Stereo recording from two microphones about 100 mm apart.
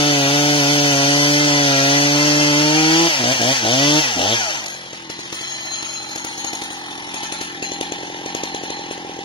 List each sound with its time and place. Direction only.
0.0 s chainsaw: 65° left (ahead or behind)